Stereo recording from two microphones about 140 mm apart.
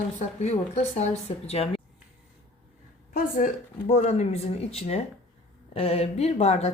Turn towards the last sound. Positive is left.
turn(degrees=50)  # may be behind; listen again after turning